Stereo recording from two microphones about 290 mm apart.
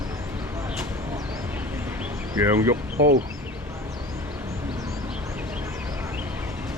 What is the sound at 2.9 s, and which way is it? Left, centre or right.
Speech, right.